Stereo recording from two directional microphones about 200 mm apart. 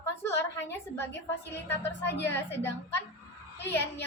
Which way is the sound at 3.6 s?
60° left (ahead or behind).